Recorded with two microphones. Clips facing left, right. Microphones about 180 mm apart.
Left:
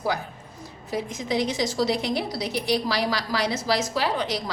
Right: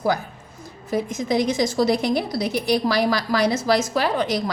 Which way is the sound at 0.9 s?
50° right (ahead or behind).